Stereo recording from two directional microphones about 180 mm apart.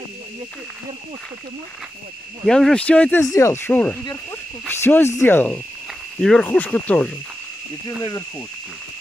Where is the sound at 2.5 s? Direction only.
5° left (ahead or behind).